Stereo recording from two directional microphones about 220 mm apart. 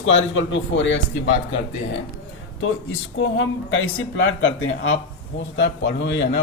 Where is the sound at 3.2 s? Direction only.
60° left (ahead or behind).